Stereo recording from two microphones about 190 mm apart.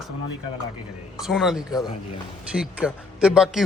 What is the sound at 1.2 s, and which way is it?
Speech, centre (ahead or behind).